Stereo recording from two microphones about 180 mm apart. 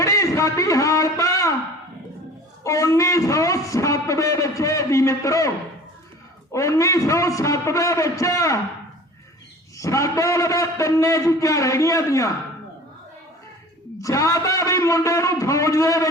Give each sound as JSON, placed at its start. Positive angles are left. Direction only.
{"t": 0.0, "sound": "a man's voice", "side_deg": 15}
{"t": 2.6, "sound": "a man's voice", "side_deg": 15}
{"t": 6.5, "sound": "a man's voice", "side_deg": 15}
{"t": 9.7, "sound": "a man's voice", "side_deg": 15}
{"t": 14.0, "sound": "a man's voice", "side_deg": 20}